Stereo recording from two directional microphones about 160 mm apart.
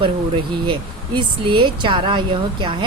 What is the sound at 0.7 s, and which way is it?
Speech, 30° right (ahead or behind).